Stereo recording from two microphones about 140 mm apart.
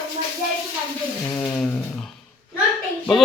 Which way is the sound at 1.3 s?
15° left (ahead or behind).